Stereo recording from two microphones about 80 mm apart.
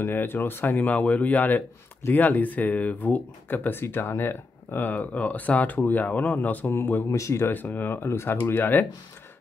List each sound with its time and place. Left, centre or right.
0.0 s speech: left
7.5 s speech: left